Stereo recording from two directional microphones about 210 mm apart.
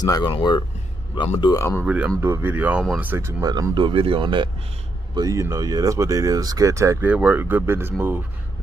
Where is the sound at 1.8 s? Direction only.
5° right (ahead or behind).